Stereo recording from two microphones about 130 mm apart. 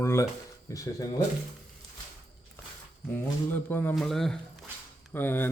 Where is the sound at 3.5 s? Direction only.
15° left (ahead or behind).